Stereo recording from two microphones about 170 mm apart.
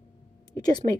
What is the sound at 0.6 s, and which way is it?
Speech, 25° left (ahead or behind).